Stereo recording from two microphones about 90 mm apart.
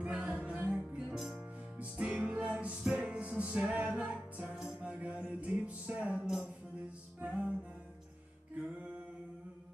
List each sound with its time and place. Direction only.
0.0 s music: 15° right (ahead or behind)
1.8 s music: 15° right (ahead or behind)